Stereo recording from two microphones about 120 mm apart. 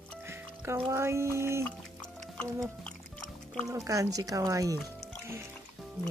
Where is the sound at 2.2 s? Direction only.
5° left (ahead or behind).